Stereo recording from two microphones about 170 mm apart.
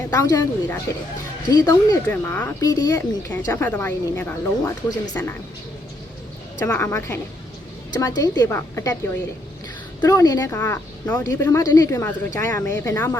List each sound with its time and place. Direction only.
0.1 s speech: 20° left (ahead or behind)
6.7 s speech: 15° left (ahead or behind)
10.0 s speech: 20° left (ahead or behind)